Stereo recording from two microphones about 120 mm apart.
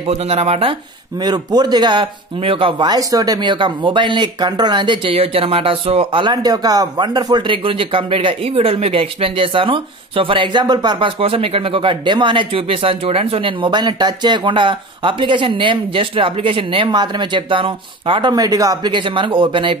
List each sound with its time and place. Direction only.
0.0 s speech: 60° right (ahead or behind)
1.2 s speech: 35° right (ahead or behind)
2.9 s speech: 30° right (ahead or behind); by 8.5 s 45° right (ahead or behind)
8.5 s speech: 55° right (ahead or behind)